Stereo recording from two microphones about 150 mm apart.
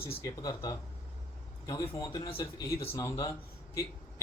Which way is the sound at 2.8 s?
20° left (ahead or behind).